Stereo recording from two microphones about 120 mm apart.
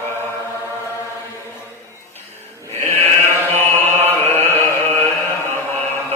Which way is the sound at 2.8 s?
20° left (ahead or behind).